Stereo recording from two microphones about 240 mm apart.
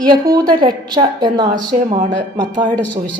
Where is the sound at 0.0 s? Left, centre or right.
Centre.